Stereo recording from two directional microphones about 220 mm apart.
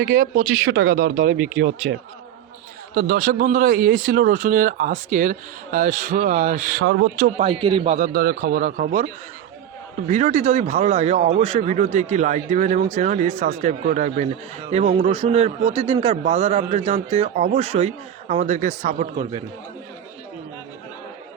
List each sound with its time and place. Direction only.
0.7 s speech: 70° right (ahead or behind)
0.9 s speech: 35° right (ahead or behind)
1.3 s speech: 65° right (ahead or behind)
2.9 s speech: 40° right (ahead or behind)
6.8 s speech: 55° right (ahead or behind)
7.2 s a man's voice: 30° right (ahead or behind)
7.9 s speech: 40° right (ahead or behind)
10.1 s a man's voice: 35° right (ahead or behind)
19.1 s a man's voice: 25° right (ahead or behind)